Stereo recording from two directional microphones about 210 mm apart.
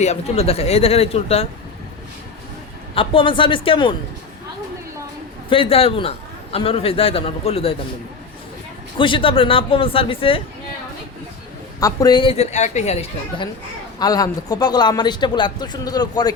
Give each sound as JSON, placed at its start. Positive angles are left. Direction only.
{"t": 0.0, "sound": "a man's voice", "side_deg": 30}
{"t": 2.9, "sound": "a man's voice", "side_deg": 25}
{"t": 5.5, "sound": "a man's voice", "side_deg": 25}
{"t": 9.0, "sound": "a man's voice", "side_deg": 25}
{"t": 11.8, "sound": "a man's voice", "side_deg": 15}
{"t": 14.0, "sound": "a man's voice", "side_deg": 20}